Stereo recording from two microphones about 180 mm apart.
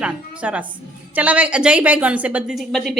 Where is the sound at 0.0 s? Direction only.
5° right (ahead or behind).